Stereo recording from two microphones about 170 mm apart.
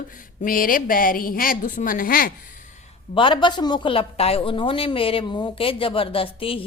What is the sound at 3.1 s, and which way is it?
A woman's voice, 30° left (ahead or behind).